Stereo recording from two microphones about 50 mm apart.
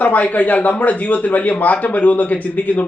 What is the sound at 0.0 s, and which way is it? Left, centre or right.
A man's voice, left.